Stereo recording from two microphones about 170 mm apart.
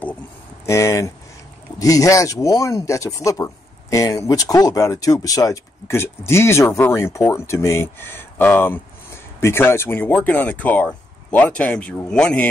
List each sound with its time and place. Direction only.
0.7 s speech: 15° left (ahead or behind)